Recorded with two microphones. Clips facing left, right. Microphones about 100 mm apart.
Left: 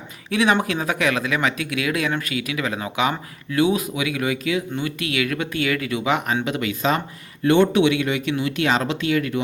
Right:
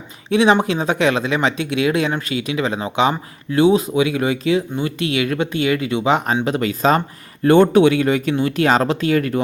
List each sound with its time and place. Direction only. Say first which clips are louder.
0.3 s speech: right 5 dB; 25° right (ahead or behind); by 9.4 s 40° right (ahead or behind)